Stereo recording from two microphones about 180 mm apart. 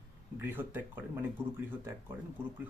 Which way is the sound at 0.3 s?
10° right (ahead or behind).